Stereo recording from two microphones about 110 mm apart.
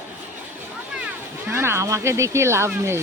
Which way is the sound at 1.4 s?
25° right (ahead or behind).